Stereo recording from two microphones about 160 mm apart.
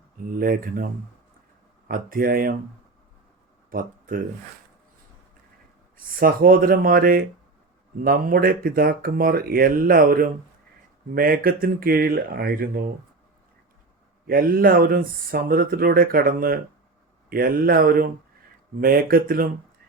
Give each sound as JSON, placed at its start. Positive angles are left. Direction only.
{"t": 0.3, "sound": "speech", "side_deg": -65}
{"t": 1.9, "sound": "speech", "side_deg": -60}
{"t": 3.7, "sound": "a sound", "side_deg": -60}
{"t": 6.1, "sound": "speech", "side_deg": -65}
{"t": 14.3, "sound": "speech", "side_deg": -65}